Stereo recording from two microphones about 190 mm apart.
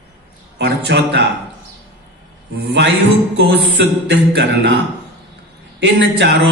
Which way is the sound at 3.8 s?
60° right (ahead or behind).